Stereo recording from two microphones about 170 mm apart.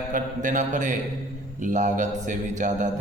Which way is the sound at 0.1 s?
50° right (ahead or behind).